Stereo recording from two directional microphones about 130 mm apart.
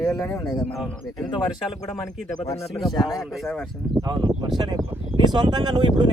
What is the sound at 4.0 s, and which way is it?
Speech, 35° right (ahead or behind).